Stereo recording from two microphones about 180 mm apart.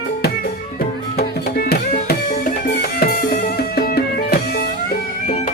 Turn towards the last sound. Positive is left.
turn(degrees=60)  # may be behind; listen again after turning